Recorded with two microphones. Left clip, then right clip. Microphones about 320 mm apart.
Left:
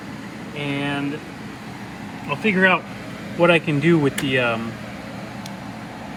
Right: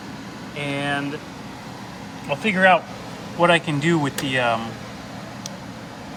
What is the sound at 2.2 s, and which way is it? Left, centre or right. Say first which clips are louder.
Speech: even; right.